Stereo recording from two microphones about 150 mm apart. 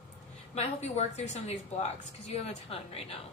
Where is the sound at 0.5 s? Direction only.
45° left (ahead or behind).